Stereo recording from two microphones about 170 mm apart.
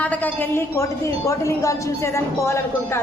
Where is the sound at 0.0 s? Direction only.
10° left (ahead or behind).